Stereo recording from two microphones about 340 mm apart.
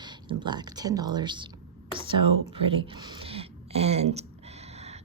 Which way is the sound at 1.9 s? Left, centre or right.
Centre.